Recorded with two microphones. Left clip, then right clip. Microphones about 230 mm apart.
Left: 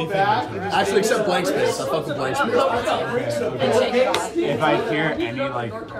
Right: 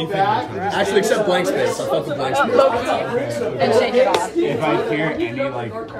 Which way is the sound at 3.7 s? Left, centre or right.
Left.